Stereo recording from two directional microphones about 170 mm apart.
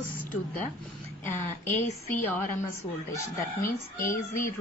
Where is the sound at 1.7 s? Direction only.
50° left (ahead or behind).